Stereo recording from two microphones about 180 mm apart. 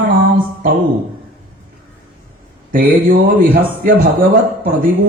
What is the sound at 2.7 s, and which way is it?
Speech, 50° right (ahead or behind).